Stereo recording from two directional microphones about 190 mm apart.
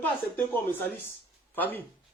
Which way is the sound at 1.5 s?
10° left (ahead or behind).